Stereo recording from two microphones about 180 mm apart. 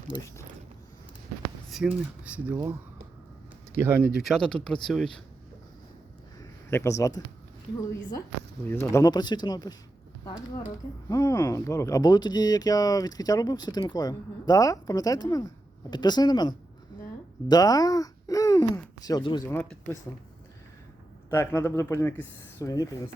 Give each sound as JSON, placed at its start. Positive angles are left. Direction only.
{"t": 0.1, "sound": "speech", "side_deg": 15}
{"t": 1.7, "sound": "speech", "side_deg": 0}
{"t": 3.8, "sound": "speech", "side_deg": -10}
{"t": 6.7, "sound": "speech", "side_deg": 15}
{"t": 8.6, "sound": "speech", "side_deg": 15}
{"t": 11.1, "sound": "speech", "side_deg": 15}
{"t": 19.5, "sound": "speech", "side_deg": 10}
{"t": 21.2, "sound": "speech", "side_deg": 10}